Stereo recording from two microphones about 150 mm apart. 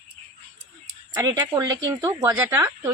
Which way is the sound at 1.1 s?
25° right (ahead or behind).